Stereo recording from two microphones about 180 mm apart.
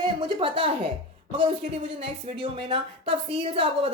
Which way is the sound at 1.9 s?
30° right (ahead or behind).